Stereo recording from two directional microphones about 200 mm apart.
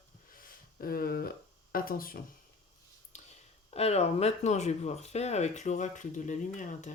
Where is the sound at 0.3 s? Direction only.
45° left (ahead or behind).